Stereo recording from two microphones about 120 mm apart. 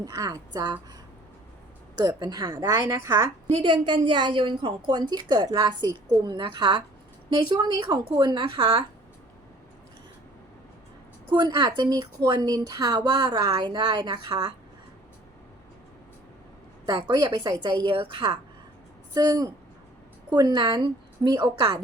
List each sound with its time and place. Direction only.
0.0 s a woman's voice: 35° right (ahead or behind)
2.0 s a woman's voice: 35° right (ahead or behind)
3.6 s a woman's voice: 40° right (ahead or behind)
11.3 s a woman's voice: 35° right (ahead or behind)
16.8 s a woman's voice: 35° right (ahead or behind)